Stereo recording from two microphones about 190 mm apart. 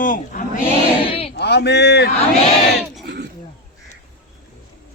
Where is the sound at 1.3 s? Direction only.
60° left (ahead or behind).